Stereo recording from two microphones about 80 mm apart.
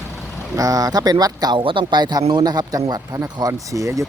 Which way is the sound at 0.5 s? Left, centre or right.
Right.